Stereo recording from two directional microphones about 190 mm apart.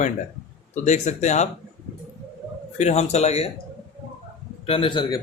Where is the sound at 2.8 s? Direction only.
35° left (ahead or behind).